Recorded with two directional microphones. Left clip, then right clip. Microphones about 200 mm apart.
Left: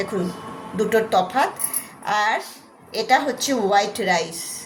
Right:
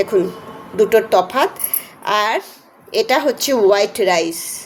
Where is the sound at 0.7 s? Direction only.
45° right (ahead or behind).